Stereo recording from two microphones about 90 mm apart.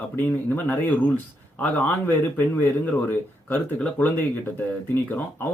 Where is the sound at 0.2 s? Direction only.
20° left (ahead or behind).